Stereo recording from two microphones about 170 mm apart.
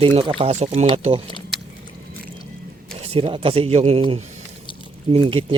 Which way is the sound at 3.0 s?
35° right (ahead or behind).